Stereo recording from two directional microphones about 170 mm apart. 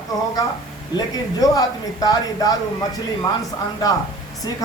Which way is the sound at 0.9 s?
20° left (ahead or behind).